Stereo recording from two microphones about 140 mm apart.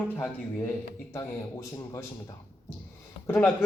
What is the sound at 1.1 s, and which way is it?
Speech, 20° left (ahead or behind).